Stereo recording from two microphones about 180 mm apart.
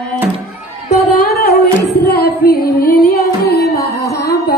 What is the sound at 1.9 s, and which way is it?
Female singing, 60° left (ahead or behind).